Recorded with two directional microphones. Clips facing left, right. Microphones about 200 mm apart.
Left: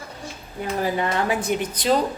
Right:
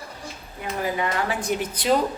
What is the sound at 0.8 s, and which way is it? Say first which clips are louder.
Speech: left 1 dB; 35° left (ahead or behind).